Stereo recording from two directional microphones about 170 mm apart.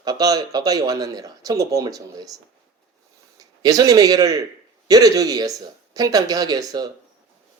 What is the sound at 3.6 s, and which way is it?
A man's voice, 20° right (ahead or behind).